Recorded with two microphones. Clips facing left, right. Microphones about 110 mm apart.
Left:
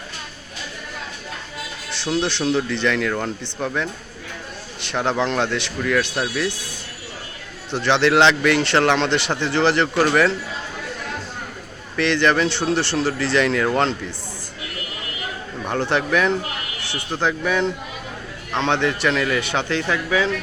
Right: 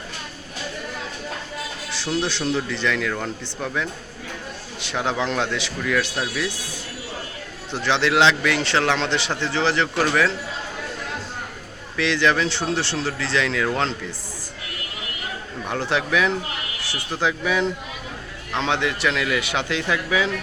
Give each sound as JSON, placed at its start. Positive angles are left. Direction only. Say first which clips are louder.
{"t": 1.9, "sound": "a man's voice", "louder": "left 3 dB", "side_deg": -5}
{"t": 7.7, "sound": "a man's voice", "louder": "left 4 dB", "side_deg": 0}
{"t": 11.9, "sound": "a man's voice", "louder": "left 2 dB", "side_deg": 0}
{"t": 15.6, "sound": "a man's voice", "louder": "left 3 dB", "side_deg": 0}